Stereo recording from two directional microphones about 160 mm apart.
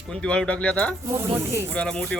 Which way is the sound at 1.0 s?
15° right (ahead or behind).